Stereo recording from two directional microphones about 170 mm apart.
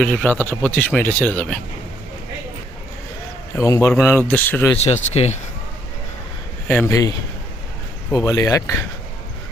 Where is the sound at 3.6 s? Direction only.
20° left (ahead or behind).